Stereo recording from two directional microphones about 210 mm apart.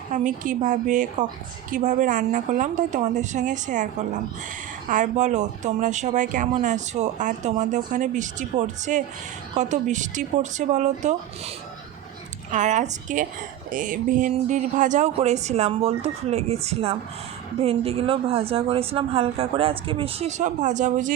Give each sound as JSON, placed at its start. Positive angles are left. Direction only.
{"t": 0.1, "sound": "speech", "side_deg": -35}
{"t": 4.9, "sound": "a woman's voice", "side_deg": -35}